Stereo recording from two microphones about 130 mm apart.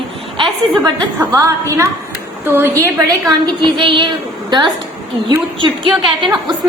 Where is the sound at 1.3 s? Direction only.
25° right (ahead or behind).